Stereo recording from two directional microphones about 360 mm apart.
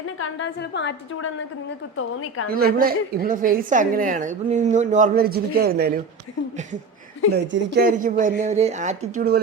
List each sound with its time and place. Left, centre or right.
0.2 s a woman's voice: left
2.5 s a woman's voice: right
7.3 s a woman's voice: right